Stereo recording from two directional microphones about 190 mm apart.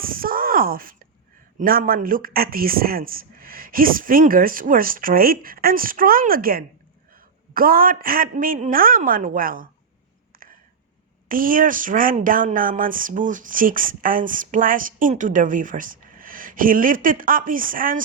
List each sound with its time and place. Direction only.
0.0 s speech: 50° right (ahead or behind)
10.3 s a sound: 45° right (ahead or behind)
11.3 s speech: 45° right (ahead or behind)